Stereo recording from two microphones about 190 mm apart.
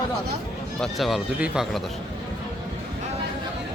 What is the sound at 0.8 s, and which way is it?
Speech, centre (ahead or behind).